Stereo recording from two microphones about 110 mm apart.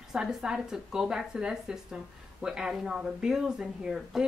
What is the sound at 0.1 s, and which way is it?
A woman's voice, 5° right (ahead or behind).